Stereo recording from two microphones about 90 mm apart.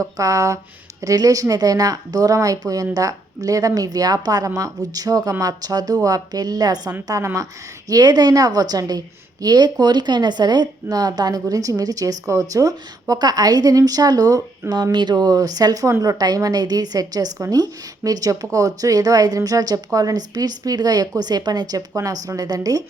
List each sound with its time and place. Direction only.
0.0 s a woman's voice: 40° right (ahead or behind)
14.9 s a woman's voice: 55° right (ahead or behind)